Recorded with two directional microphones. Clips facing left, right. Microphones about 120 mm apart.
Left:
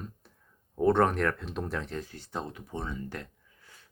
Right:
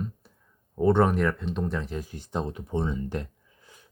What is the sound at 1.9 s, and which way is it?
Speech, 15° right (ahead or behind).